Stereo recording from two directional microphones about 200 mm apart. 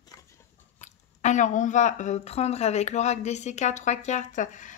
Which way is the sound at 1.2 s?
40° left (ahead or behind).